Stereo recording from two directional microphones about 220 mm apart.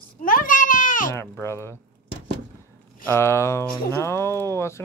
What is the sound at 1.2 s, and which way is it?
Speech, 10° left (ahead or behind).